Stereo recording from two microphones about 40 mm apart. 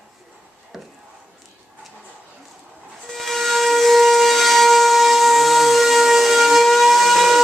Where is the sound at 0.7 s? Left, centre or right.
Centre.